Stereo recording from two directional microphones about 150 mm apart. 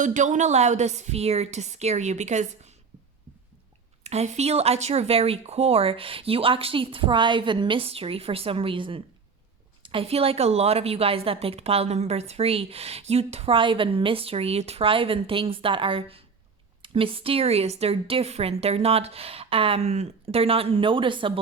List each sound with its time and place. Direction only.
0.0 s a woman's voice: 55° right (ahead or behind)
4.0 s a woman's voice: 45° right (ahead or behind)